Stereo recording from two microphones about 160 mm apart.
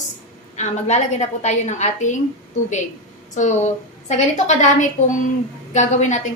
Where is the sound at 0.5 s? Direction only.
45° left (ahead or behind).